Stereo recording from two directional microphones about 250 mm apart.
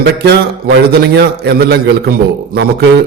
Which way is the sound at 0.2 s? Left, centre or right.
Right.